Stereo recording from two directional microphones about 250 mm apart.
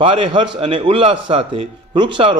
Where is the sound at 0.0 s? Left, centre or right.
Centre.